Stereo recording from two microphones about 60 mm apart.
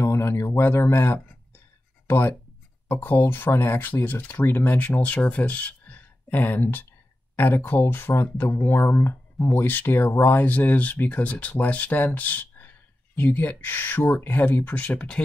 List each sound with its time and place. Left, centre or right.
0.0 s a sound: left
2.0 s speech: left
14.8 s speech: left